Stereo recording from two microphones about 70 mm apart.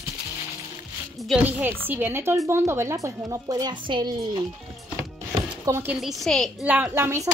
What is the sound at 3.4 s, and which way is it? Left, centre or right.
Speech, right.